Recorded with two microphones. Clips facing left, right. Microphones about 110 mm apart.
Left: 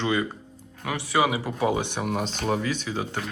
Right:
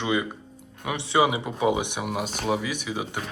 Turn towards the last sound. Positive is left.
turn(degrees=-15)  # may be behind; listen again after turning